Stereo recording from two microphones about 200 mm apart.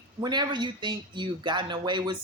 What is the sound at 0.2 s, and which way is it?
Speech, 20° right (ahead or behind).